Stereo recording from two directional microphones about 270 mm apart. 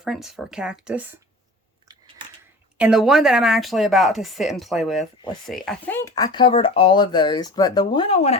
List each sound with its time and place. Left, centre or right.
0.0 s speech: centre
2.7 s speech: centre; by 8.4 s left